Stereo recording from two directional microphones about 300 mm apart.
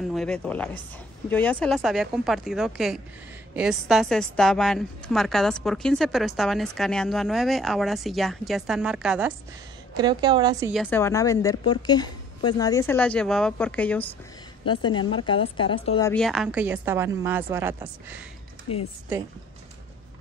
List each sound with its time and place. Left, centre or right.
0.1 s a woman's voice: centre
9.9 s a woman's voice: centre
10.7 s a woman's voice: centre
14.6 s a woman's voice: centre
16.1 s a woman's voice: centre
18.7 s a woman's voice: left